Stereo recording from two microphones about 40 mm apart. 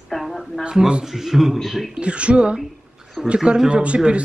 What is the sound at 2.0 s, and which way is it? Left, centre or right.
Speech, right.